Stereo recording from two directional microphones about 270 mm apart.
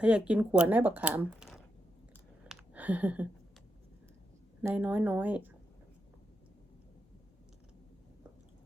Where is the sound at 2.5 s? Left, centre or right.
Centre.